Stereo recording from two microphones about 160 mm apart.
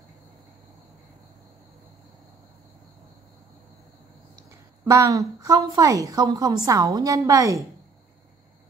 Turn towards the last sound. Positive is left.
turn(degrees=-20)  # may be behind; listen again after turning